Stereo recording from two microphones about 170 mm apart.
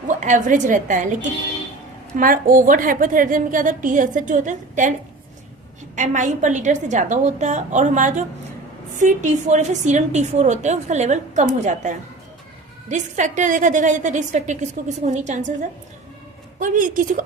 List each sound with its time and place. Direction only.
0.2 s a woman's voice: 50° right (ahead or behind)
6.0 s a woman's voice: 45° right (ahead or behind)
16.6 s a woman's voice: 50° right (ahead or behind)